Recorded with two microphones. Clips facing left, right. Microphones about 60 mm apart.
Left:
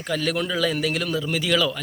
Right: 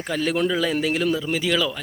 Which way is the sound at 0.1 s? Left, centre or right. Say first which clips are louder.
Right 2 dB; right.